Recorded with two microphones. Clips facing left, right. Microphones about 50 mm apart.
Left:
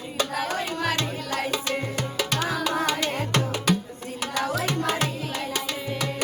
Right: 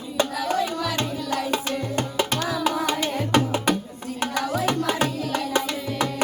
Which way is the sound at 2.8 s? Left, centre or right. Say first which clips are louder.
Right 1 dB; right.